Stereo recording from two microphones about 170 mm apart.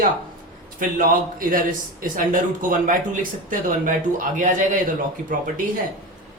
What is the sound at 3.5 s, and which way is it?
A man's voice, 50° right (ahead or behind).